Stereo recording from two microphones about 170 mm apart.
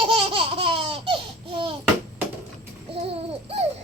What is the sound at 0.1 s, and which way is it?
Laughter, 30° right (ahead or behind).